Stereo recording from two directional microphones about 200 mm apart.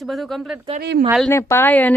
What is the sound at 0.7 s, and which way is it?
Speech, 60° right (ahead or behind).